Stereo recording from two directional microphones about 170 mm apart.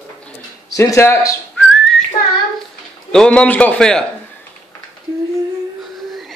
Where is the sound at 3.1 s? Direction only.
5° left (ahead or behind).